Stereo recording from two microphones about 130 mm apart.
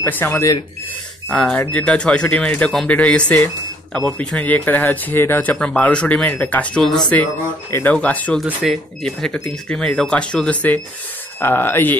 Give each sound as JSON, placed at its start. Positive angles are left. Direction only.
{"t": 0.0, "sound": "speech", "side_deg": 15}
{"t": 1.3, "sound": "speech", "side_deg": 10}